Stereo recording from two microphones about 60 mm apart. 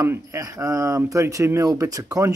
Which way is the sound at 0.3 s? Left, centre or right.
Right.